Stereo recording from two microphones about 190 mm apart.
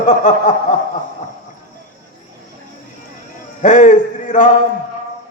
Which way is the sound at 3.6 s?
40° left (ahead or behind).